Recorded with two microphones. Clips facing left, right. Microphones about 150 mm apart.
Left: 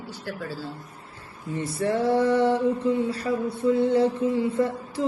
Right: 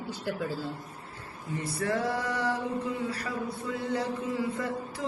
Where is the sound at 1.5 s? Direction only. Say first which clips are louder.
Left 5 dB; 30° left (ahead or behind).